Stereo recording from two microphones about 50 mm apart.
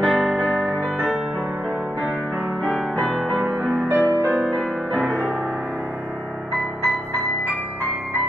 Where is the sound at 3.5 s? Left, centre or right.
Centre.